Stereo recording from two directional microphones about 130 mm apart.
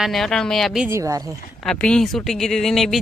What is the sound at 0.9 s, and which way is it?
Speech, 25° right (ahead or behind).